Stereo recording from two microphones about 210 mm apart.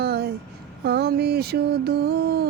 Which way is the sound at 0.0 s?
50° right (ahead or behind).